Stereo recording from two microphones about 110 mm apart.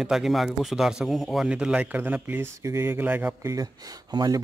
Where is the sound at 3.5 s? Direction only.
35° right (ahead or behind).